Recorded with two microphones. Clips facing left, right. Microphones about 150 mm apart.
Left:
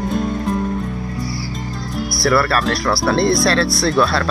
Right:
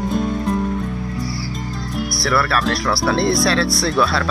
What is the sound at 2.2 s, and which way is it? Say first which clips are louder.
Speech: left 3 dB; centre (ahead or behind).